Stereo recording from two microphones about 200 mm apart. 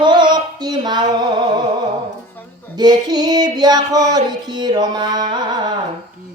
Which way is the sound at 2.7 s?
20° right (ahead or behind).